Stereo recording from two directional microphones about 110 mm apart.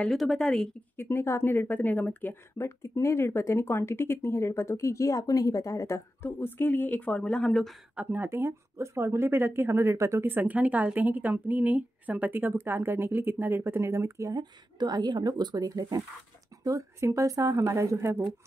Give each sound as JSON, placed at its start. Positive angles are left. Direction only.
{"t": 0.0, "sound": "a woman's voice", "side_deg": 0}
{"t": 0.9, "sound": "speech", "side_deg": 20}
{"t": 7.9, "sound": "speech", "side_deg": -15}
{"t": 14.4, "sound": "speech", "side_deg": -40}